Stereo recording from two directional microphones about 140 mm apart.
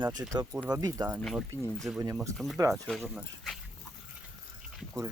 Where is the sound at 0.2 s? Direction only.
15° right (ahead or behind).